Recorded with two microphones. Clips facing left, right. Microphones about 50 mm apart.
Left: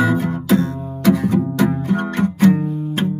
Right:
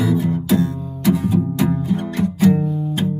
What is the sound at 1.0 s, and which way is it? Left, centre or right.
Music, left.